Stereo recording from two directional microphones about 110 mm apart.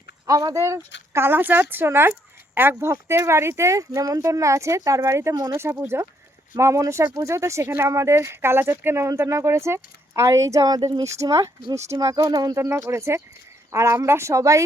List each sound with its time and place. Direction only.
0.3 s speech: 35° right (ahead or behind)
11.0 s speech: 30° right (ahead or behind)
12.5 s speech: 25° right (ahead or behind)